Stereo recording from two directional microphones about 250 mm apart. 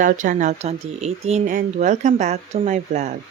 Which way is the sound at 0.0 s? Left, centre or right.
Right.